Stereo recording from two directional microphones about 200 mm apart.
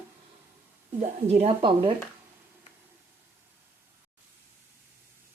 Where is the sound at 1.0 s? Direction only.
30° right (ahead or behind).